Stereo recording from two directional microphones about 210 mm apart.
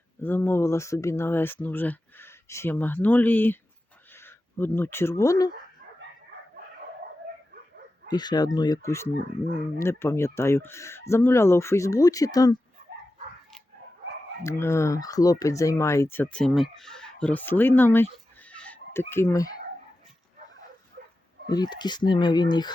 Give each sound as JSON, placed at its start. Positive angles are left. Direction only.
{"t": 0.2, "sound": "speech", "side_deg": 10}
{"t": 8.1, "sound": "speech", "side_deg": 20}
{"t": 14.4, "sound": "speech", "side_deg": 10}
{"t": 21.5, "sound": "speech", "side_deg": 20}